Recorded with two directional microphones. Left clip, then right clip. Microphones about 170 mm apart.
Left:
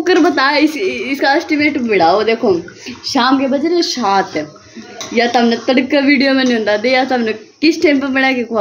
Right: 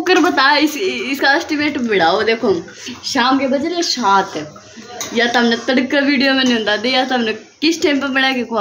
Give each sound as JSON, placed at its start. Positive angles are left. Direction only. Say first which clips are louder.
{"t": 0.0, "sound": "speech", "louder": "left 1 dB", "side_deg": 10}
{"t": 3.2, "sound": "a woman's voice", "louder": "left 2 dB", "side_deg": 35}
{"t": 5.2, "sound": "speech", "louder": "left 2 dB", "side_deg": 15}